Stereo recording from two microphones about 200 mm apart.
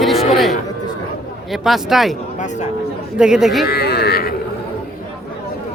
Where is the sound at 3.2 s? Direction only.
5° right (ahead or behind).